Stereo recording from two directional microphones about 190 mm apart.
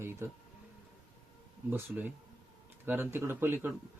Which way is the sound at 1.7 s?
10° right (ahead or behind).